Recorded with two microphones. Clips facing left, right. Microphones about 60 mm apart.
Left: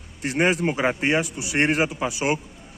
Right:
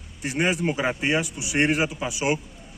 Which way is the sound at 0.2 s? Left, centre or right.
Left.